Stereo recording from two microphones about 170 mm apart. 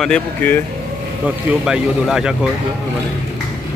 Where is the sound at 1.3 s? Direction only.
5° right (ahead or behind).